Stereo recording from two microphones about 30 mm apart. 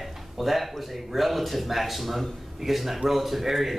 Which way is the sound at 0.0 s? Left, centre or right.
Centre.